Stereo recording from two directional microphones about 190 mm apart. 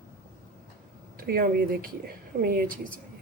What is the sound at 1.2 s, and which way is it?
A woman's voice, 50° right (ahead or behind).